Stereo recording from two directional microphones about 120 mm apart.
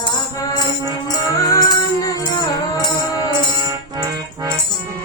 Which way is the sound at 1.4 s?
30° left (ahead or behind).